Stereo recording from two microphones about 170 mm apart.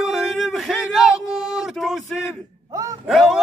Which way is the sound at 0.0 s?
Centre (ahead or behind).